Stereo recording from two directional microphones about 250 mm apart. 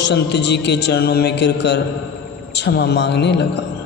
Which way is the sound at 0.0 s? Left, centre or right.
Left.